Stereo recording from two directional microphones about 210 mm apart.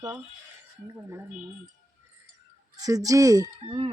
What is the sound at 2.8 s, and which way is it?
Speech, 15° right (ahead or behind).